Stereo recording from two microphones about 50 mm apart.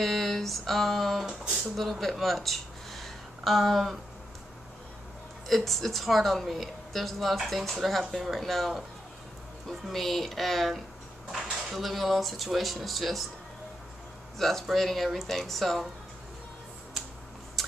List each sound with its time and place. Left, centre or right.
0.0 s speech: centre
1.2 s a sound: centre
1.8 s speech: centre
5.5 s a woman's voice: centre
11.7 s a woman's voice: centre
14.4 s a woman's voice: centre
17.6 s a sound: centre